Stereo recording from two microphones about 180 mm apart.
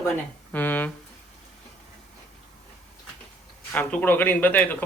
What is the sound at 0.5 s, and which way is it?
Speech, 10° left (ahead or behind).